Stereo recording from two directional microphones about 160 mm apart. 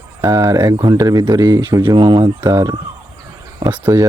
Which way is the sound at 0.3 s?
20° right (ahead or behind).